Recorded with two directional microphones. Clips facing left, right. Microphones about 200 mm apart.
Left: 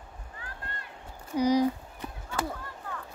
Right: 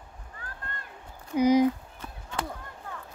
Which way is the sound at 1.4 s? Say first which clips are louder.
Right 3 dB; 20° right (ahead or behind).